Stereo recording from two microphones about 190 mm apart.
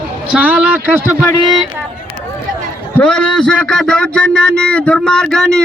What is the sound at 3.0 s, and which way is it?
Speech, 5° left (ahead or behind).